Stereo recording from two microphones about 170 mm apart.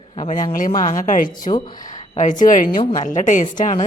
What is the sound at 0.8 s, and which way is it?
Speech, 50° left (ahead or behind).